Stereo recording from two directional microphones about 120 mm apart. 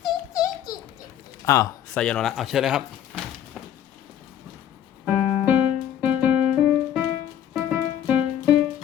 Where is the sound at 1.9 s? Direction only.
5° left (ahead or behind).